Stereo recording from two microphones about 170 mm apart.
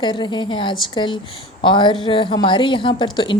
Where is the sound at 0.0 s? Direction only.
25° left (ahead or behind).